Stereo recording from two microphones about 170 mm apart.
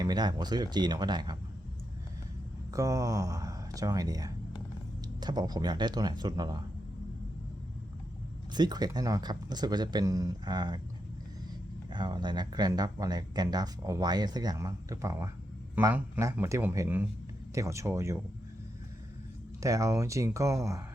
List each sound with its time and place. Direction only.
0.0 s speech: 25° right (ahead or behind)
2.7 s speech: 20° right (ahead or behind)
8.5 s speech: 25° right (ahead or behind)
11.9 s speech: 25° right (ahead or behind)
19.6 s speech: 20° right (ahead or behind)